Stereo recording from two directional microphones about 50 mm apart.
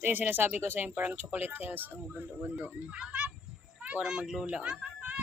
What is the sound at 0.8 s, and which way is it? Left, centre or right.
A child's voice, right.